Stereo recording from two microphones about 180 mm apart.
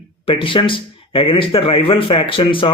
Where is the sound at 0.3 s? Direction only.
30° left (ahead or behind).